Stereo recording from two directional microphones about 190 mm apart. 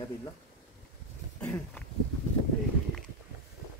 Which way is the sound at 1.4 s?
5° left (ahead or behind).